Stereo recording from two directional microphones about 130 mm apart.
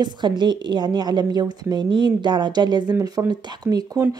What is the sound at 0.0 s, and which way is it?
A woman's voice, 35° right (ahead or behind).